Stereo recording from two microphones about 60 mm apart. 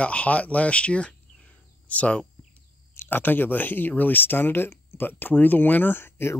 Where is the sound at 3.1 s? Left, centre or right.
Left.